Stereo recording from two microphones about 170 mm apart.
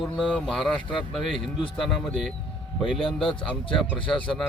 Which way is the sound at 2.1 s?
Centre (ahead or behind).